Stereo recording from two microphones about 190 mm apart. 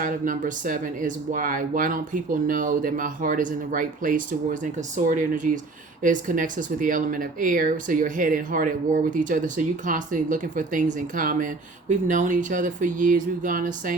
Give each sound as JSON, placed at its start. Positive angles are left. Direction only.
{"t": 0.0, "sound": "speech", "side_deg": -45}